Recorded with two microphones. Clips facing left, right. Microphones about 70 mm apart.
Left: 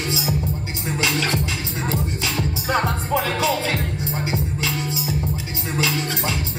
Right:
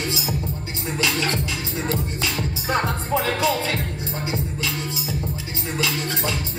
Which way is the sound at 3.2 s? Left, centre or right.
Left.